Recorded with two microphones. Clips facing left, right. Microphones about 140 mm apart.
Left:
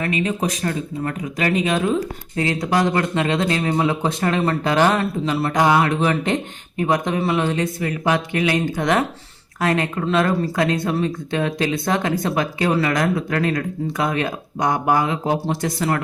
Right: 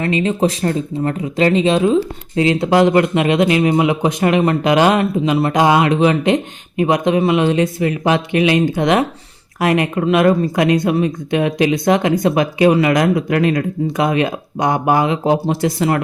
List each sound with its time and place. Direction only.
0.0 s speech: 30° right (ahead or behind)